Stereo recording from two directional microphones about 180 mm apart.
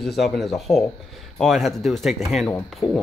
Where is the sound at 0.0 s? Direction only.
Centre (ahead or behind).